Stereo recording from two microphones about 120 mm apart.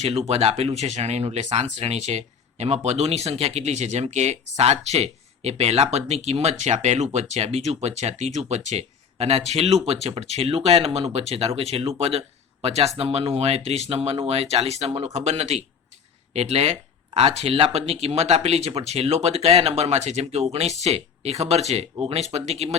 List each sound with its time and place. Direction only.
0.3 s speech: 60° right (ahead or behind)